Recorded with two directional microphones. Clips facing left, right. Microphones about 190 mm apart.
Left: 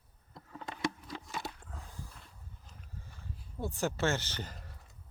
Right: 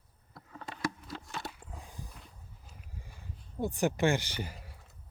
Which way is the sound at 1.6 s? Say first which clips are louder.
Right 1 dB; 15° right (ahead or behind).